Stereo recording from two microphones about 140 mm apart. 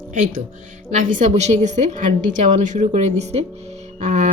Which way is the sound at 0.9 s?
65° right (ahead or behind).